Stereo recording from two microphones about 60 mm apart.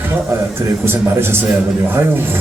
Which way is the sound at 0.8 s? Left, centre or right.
Right.